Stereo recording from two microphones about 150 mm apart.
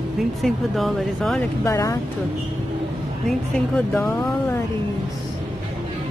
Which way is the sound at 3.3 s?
5° left (ahead or behind).